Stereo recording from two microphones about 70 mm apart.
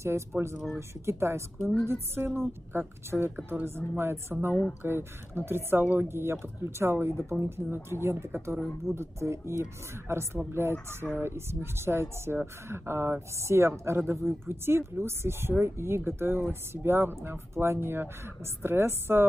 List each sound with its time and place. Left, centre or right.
0.7 s speech: right